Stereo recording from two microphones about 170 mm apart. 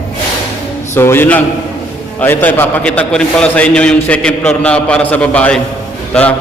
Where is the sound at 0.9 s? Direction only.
15° left (ahead or behind).